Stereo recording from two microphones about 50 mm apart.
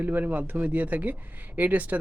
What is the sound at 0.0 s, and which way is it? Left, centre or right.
Speech, right.